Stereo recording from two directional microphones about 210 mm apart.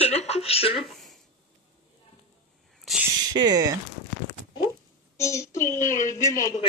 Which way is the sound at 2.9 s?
Centre (ahead or behind).